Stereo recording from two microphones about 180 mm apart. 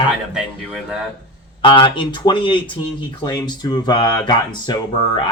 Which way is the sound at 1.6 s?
30° left (ahead or behind).